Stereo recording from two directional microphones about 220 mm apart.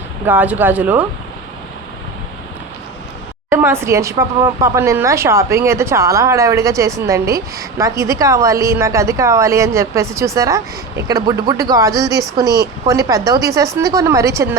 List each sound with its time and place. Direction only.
0.3 s speech: 10° right (ahead or behind)
3.5 s speech: 10° right (ahead or behind)